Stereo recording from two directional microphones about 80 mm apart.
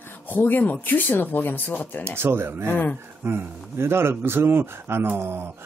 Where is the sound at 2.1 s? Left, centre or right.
Right.